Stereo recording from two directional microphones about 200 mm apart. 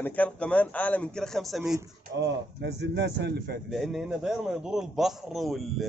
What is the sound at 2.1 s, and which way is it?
Speech, 60° right (ahead or behind).